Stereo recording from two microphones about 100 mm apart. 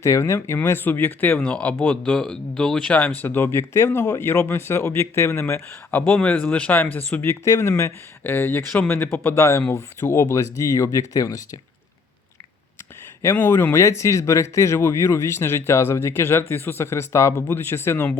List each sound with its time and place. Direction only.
0.0 s speech: 30° left (ahead or behind)
7.4 s speech: 30° left (ahead or behind)
13.2 s speech: 25° left (ahead or behind)